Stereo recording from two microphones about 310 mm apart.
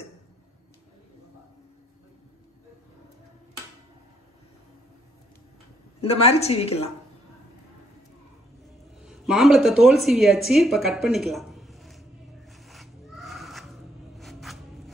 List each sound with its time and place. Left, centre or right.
5.9 s a woman's voice: centre
9.0 s speech: centre
12.4 s neigh: centre